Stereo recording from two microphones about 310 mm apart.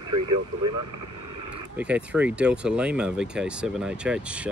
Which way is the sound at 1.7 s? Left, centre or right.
Centre.